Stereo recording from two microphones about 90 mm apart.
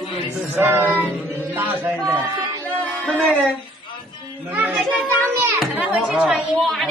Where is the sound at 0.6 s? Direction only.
25° right (ahead or behind).